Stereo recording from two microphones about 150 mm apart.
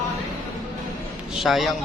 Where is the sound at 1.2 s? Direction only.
Centre (ahead or behind).